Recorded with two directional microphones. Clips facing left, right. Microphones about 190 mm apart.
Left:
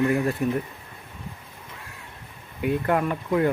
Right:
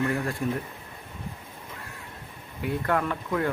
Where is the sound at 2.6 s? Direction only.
20° left (ahead or behind).